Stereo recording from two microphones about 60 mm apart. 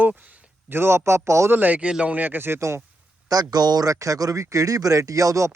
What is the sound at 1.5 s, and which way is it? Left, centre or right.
Speech, right.